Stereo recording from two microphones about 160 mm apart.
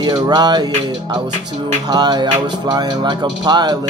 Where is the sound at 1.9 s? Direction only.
25° right (ahead or behind).